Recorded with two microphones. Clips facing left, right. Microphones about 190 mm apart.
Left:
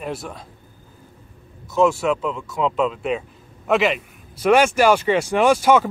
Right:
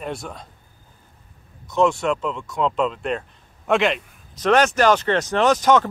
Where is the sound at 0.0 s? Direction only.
Centre (ahead or behind).